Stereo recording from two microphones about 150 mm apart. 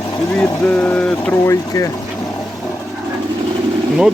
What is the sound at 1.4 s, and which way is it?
Speech, 20° left (ahead or behind).